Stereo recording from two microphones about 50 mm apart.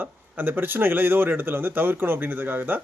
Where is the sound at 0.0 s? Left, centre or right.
Right.